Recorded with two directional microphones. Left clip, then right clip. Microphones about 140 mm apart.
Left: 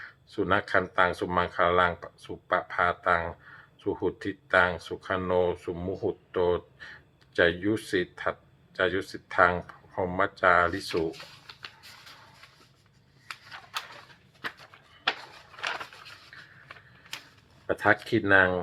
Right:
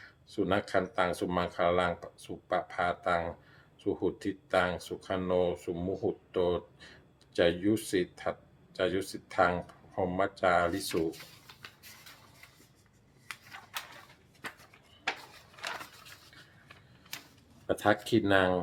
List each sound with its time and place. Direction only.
0.0 s speech: 20° right (ahead or behind)
17.7 s speech: 25° right (ahead or behind)